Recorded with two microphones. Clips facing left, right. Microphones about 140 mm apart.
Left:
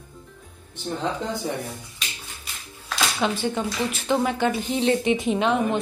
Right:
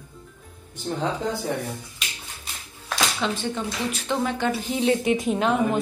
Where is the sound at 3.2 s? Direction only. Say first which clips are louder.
Left 2 dB; 10° left (ahead or behind).